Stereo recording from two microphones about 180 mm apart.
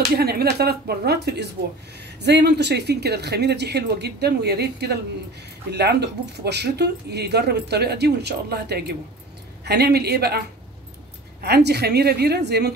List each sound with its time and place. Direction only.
0.2 s a woman's voice: 60° right (ahead or behind)
11.4 s a woman's voice: 65° right (ahead or behind)